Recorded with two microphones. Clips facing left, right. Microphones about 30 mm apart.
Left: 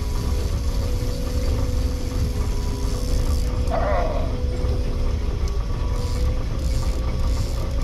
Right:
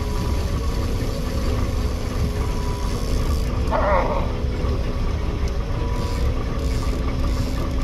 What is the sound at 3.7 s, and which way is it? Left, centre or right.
Dog, right.